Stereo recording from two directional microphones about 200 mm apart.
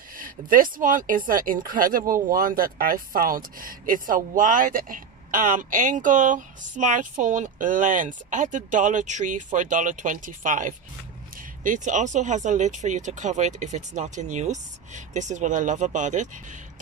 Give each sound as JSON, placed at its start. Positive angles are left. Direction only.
{"t": 0.2, "sound": "speech", "side_deg": -45}